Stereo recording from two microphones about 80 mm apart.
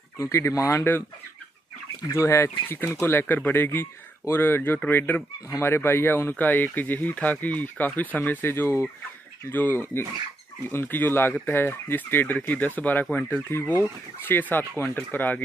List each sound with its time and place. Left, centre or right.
0.2 s speech: left
2.0 s speech: left